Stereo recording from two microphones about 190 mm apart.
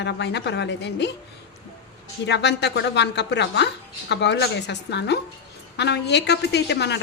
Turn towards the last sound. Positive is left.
turn(degrees=60)  # may be behind; listen again after turning